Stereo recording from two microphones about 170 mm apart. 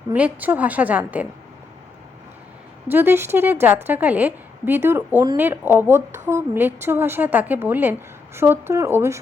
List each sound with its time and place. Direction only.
0.1 s a woman's voice: 10° right (ahead or behind)
2.8 s a woman's voice: 10° right (ahead or behind)